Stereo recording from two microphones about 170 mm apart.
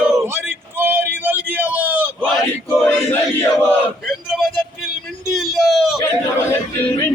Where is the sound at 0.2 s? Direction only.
10° right (ahead or behind).